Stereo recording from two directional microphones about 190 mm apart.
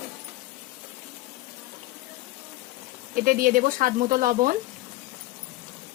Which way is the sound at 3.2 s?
45° right (ahead or behind).